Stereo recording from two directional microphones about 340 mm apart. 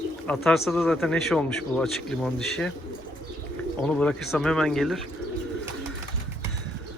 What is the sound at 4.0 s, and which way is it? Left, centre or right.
Speech, centre.